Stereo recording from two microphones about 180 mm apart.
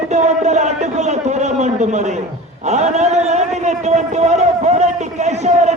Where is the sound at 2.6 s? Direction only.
40° right (ahead or behind).